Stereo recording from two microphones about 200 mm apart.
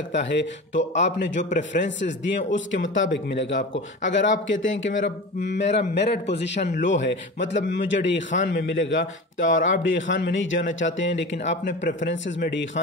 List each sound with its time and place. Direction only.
0.1 s a man's voice: 60° left (ahead or behind)